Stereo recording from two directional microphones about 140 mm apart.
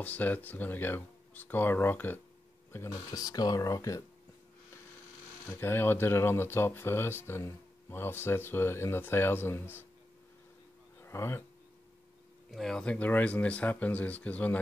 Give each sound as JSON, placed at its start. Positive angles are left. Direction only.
{"t": 0.0, "sound": "speech", "side_deg": 10}
{"t": 5.5, "sound": "speech", "side_deg": 15}
{"t": 11.0, "sound": "speech", "side_deg": 20}
{"t": 12.4, "sound": "speech", "side_deg": 0}